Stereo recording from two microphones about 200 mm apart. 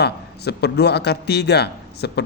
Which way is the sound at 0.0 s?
55° left (ahead or behind).